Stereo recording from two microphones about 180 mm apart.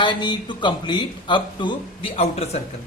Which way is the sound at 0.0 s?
25° left (ahead or behind).